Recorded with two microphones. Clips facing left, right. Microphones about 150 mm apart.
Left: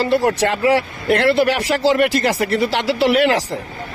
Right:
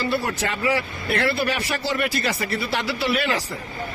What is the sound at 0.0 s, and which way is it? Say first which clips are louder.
A man's voice: left 8 dB; 80° left.